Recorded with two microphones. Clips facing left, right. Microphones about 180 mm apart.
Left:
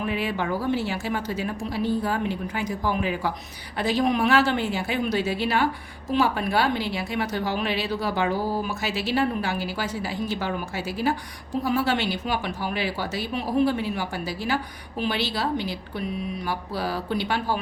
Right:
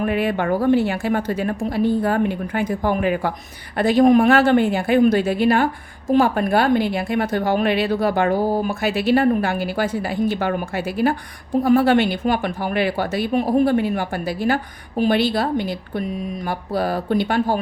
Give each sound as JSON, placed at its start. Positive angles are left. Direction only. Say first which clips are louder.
{"t": 0.0, "sound": "a woman's voice", "louder": "right 6 dB", "side_deg": -55}